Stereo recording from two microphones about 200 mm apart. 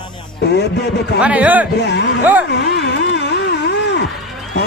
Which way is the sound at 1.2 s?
5° right (ahead or behind).